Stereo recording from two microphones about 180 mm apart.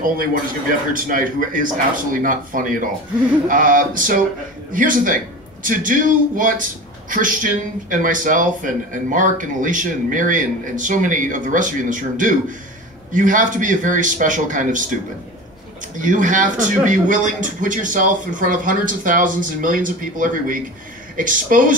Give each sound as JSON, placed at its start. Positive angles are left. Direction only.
{"t": 0.0, "sound": "a man's voice", "side_deg": -50}
{"t": 16.0, "sound": "a man's voice", "side_deg": -45}